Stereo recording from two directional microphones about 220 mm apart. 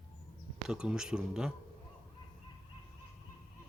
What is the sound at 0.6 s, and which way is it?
Speech, 5° right (ahead or behind).